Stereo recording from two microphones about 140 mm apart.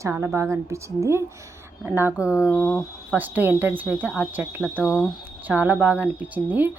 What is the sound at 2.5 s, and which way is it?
Speech, 15° left (ahead or behind).